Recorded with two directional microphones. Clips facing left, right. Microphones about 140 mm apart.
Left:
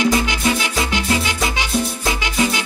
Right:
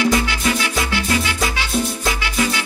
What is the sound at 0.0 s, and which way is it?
Music, 20° left (ahead or behind).